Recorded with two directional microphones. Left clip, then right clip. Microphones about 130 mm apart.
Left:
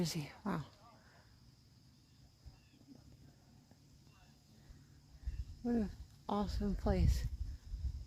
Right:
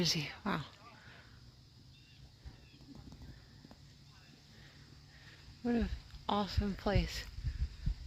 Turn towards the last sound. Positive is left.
turn(degrees=20)  # may be behind; listen again after turning